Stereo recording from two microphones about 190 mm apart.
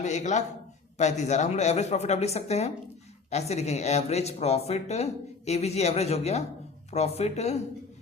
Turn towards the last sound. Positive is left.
turn(degrees=35)  # may be behind; listen again after turning